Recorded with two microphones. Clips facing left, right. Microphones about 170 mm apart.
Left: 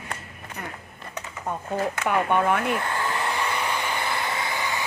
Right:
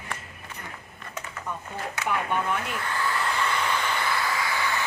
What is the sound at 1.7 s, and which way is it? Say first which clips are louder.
Speech: left 6 dB; 55° left (ahead or behind).